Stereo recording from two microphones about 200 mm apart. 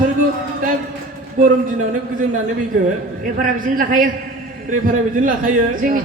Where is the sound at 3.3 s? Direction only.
40° right (ahead or behind).